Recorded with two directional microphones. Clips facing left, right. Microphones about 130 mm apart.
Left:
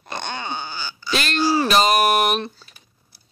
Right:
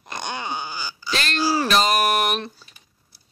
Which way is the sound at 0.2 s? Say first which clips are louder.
Right 1 dB; 5° right (ahead or behind).